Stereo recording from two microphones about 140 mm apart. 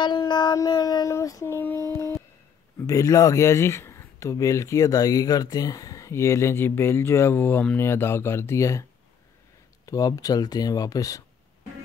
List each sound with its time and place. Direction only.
0.0 s child singing: 30° left (ahead or behind); by 1.8 s 15° left (ahead or behind)
2.9 s speech: 25° left (ahead or behind)
9.8 s speech: 25° left (ahead or behind)